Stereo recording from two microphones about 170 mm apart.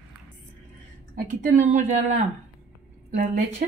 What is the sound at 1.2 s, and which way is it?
Speech, 50° right (ahead or behind).